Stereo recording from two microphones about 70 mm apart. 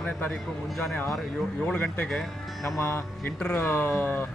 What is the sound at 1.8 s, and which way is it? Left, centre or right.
Speech, left.